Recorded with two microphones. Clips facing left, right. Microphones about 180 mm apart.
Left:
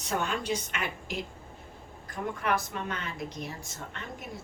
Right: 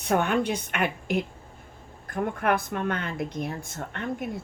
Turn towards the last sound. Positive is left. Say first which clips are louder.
# right 9 dB
turn(degrees=-55)  # may be behind; listen again after turning